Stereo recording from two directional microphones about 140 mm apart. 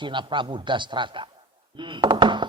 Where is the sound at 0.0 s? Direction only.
35° right (ahead or behind).